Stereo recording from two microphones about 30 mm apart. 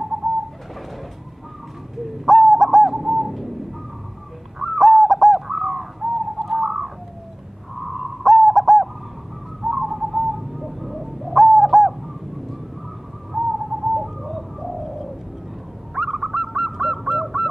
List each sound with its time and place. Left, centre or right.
2.0 s bird: centre
4.6 s bird: centre
7.8 s owl: centre
9.6 s bird: centre
9.8 s bird: centre
15.9 s goose: centre